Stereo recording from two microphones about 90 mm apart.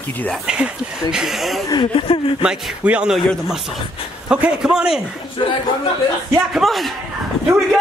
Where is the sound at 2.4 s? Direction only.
15° right (ahead or behind).